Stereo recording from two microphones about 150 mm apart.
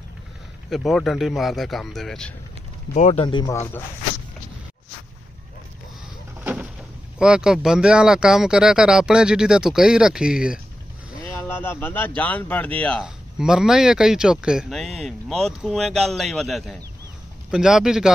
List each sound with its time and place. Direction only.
0.7 s a man's voice: centre (ahead or behind)
2.9 s speech: 55° left (ahead or behind)
3.2 s speech: 30° left (ahead or behind)
3.4 s speech: 15° left (ahead or behind)
6.4 s a sound: 5° right (ahead or behind)
7.2 s a man's voice: 5° right (ahead or behind)
11.1 s a sound: 20° left (ahead or behind)
12.2 s speech: 10° left (ahead or behind)
13.0 s a man's voice: 5° right (ahead or behind)